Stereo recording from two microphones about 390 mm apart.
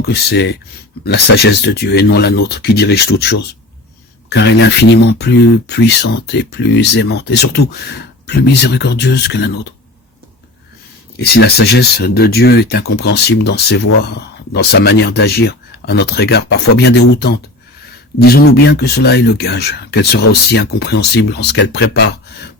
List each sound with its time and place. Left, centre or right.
0.1 s speech: left
11.2 s speech: left